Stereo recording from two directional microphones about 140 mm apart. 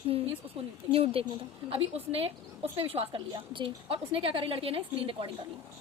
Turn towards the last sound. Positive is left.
turn(degrees=-40)  # may be behind; listen again after turning